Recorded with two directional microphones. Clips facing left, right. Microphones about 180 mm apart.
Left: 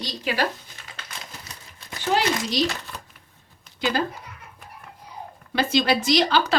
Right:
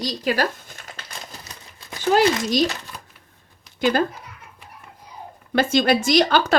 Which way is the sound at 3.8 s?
50° right (ahead or behind).